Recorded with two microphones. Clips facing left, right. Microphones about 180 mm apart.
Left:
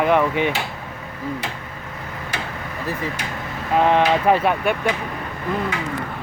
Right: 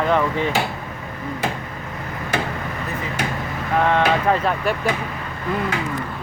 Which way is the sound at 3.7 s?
15° left (ahead or behind).